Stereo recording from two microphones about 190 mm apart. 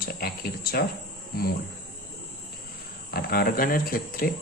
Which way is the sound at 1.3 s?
50° left (ahead or behind).